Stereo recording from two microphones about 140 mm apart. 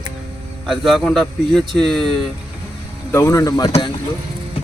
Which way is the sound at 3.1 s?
20° left (ahead or behind).